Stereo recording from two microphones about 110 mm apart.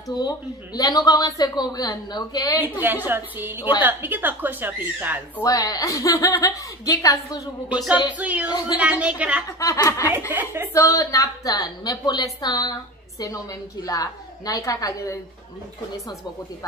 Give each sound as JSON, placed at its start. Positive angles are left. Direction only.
{"t": 0.1, "sound": "speech", "side_deg": 35}
{"t": 2.6, "sound": "a woman's voice", "side_deg": -15}
{"t": 5.4, "sound": "speech", "side_deg": 30}
{"t": 7.7, "sound": "speech", "side_deg": -10}
{"t": 8.5, "sound": "speech", "side_deg": 40}
{"t": 9.0, "sound": "speech", "side_deg": -10}
{"t": 9.5, "sound": "speech", "side_deg": 30}
{"t": 10.0, "sound": "speech", "side_deg": -15}
{"t": 10.7, "sound": "speech", "side_deg": 30}
{"t": 13.8, "sound": "speech", "side_deg": 35}